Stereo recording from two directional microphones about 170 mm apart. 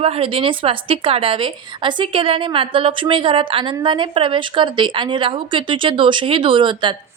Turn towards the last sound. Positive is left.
turn(degrees=-30)  # may be behind; listen again after turning